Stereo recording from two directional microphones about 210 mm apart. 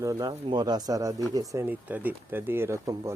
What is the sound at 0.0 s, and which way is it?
Speech, 15° right (ahead or behind).